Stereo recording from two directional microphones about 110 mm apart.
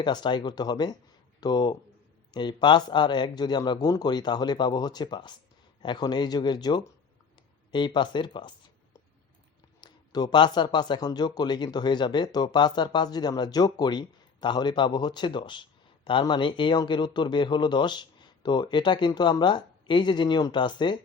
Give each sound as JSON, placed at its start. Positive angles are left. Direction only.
{"t": 0.0, "sound": "speech", "side_deg": 45}
{"t": 9.8, "sound": "speech", "side_deg": 40}